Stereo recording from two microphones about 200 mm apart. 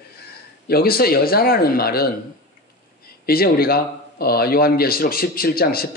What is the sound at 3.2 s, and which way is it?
Speech, 50° left (ahead or behind).